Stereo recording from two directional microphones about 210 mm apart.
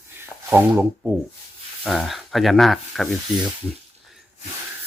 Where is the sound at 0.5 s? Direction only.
10° right (ahead or behind).